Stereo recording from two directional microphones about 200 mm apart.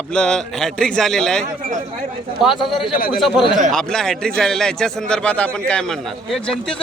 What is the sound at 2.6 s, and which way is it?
A man's voice, centre (ahead or behind).